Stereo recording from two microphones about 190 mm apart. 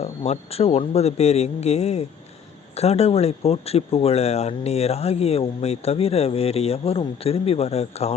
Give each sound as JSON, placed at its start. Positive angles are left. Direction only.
{"t": 0.0, "sound": "speech", "side_deg": 35}